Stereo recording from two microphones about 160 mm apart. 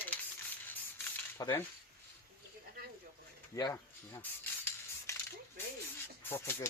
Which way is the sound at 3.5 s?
20° left (ahead or behind).